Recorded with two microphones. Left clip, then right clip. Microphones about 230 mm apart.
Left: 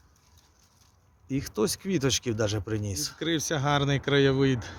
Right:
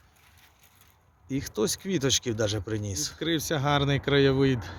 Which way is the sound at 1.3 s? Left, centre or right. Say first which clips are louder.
Even; centre.